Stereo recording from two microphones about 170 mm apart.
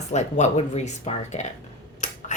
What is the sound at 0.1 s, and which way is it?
Speech, 45° left (ahead or behind).